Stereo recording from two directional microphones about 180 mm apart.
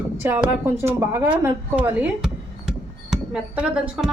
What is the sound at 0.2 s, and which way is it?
A woman's voice, 10° right (ahead or behind).